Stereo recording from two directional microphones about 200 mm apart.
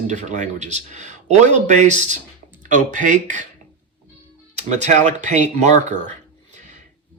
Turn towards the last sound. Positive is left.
turn(degrees=-35)  # may be behind; listen again after turning